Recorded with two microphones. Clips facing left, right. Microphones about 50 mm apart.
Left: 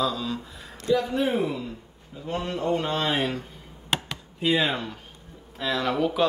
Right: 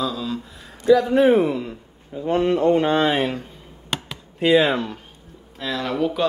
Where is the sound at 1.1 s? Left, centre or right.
Right.